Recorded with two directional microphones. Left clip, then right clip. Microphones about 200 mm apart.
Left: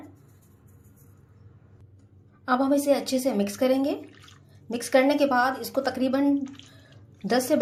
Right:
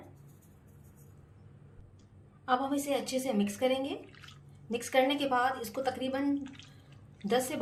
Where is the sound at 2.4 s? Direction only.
40° left (ahead or behind).